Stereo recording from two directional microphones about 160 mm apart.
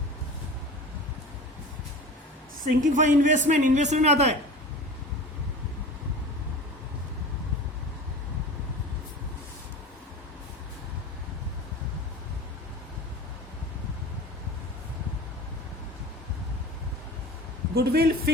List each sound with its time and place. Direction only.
2.6 s a man's voice: 55° right (ahead or behind)
17.7 s a man's voice: 75° right (ahead or behind)